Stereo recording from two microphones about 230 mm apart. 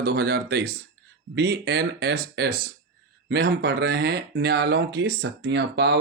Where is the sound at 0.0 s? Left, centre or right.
Right.